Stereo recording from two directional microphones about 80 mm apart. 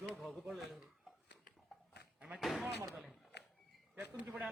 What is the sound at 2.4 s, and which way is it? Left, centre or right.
Speech, centre.